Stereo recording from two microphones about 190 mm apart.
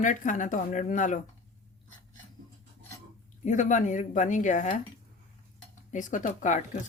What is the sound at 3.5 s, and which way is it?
Speech, 40° left (ahead or behind).